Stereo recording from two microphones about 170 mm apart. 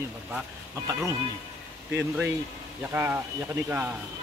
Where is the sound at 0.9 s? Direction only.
20° right (ahead or behind).